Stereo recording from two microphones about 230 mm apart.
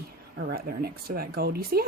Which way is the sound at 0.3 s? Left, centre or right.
Right.